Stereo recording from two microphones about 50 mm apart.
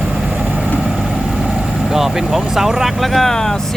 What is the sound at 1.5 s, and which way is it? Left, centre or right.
Speech, centre.